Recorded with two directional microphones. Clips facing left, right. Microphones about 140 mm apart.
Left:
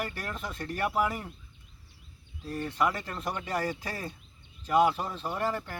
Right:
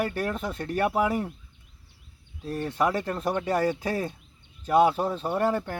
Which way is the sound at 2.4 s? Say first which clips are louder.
Right 4 dB; 25° right (ahead or behind).